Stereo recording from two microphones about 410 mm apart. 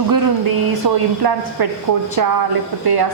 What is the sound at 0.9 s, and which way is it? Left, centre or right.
A woman's voice, right.